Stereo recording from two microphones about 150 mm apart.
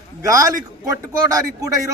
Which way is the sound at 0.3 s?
20° right (ahead or behind).